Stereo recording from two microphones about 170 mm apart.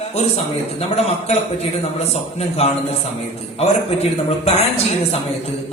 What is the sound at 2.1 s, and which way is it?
Speech, 40° left (ahead or behind).